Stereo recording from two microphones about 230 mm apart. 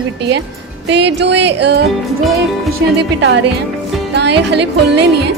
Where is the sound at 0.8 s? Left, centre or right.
Right.